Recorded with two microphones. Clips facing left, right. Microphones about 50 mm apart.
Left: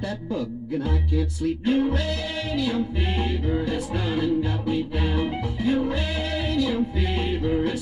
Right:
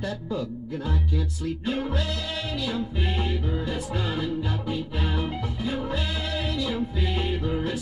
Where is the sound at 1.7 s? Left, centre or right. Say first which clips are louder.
Left 6 dB; left.